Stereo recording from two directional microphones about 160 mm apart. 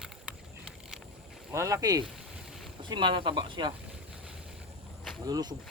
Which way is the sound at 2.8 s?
30° right (ahead or behind).